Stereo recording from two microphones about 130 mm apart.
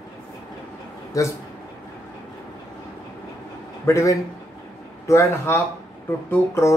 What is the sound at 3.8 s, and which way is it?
Speech, 25° left (ahead or behind).